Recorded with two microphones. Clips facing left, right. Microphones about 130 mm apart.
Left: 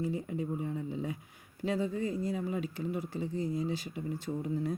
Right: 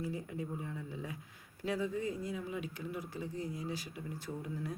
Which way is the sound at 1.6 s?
30° left (ahead or behind).